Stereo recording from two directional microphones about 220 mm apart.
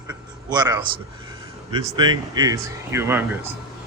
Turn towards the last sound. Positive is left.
turn(degrees=-10)  # may be behind; listen again after turning